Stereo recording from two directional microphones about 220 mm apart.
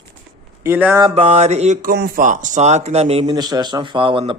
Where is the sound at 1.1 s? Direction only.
30° right (ahead or behind).